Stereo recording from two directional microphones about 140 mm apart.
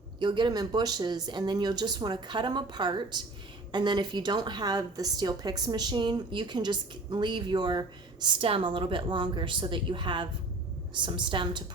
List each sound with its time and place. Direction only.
0.2 s a woman's voice: 35° right (ahead or behind)